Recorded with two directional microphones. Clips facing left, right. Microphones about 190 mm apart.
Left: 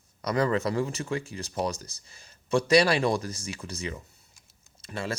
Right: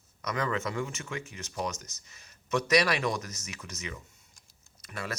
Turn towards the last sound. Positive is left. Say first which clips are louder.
# left 5 dB
turn(degrees=25)  # may be behind; listen again after turning